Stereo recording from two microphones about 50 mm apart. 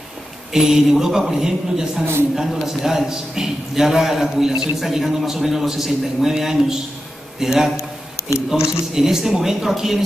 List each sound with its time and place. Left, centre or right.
0.5 s a man's voice: centre
8.2 s a sound: left
8.9 s a man's voice: centre